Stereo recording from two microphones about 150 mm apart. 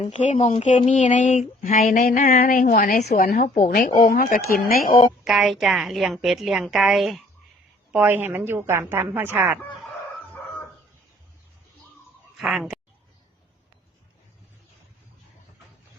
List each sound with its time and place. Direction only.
0.1 s speech: 50° left (ahead or behind)
0.9 s a sound: 55° left (ahead or behind); by 2.3 s 80° left
2.4 s a woman's voice: 80° left; by 3.8 s 55° left (ahead or behind)
4.1 s a woman's voice: 75° left (ahead or behind)
5.2 s a woman's voice: centre (ahead or behind)
7.9 s a woman's voice: 10° right (ahead or behind)
12.4 s speech: centre (ahead or behind)